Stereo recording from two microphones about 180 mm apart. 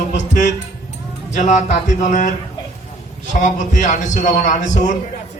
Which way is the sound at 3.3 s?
45° left (ahead or behind).